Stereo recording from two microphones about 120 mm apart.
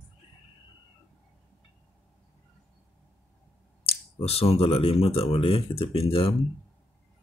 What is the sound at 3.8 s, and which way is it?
Speech, 55° left (ahead or behind).